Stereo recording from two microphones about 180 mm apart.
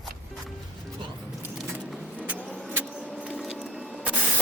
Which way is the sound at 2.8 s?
5° left (ahead or behind).